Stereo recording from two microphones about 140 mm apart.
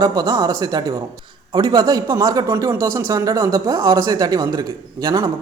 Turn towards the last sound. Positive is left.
turn(degrees=-30)  # may be behind; listen again after turning